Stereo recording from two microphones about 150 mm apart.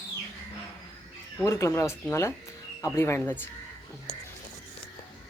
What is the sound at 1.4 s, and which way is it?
Speech, 20° left (ahead or behind).